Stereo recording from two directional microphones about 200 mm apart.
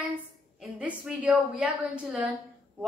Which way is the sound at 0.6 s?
5° right (ahead or behind).